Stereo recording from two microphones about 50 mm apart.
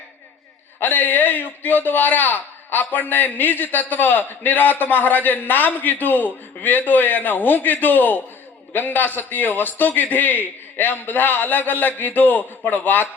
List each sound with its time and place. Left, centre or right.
0.8 s a man's voice: left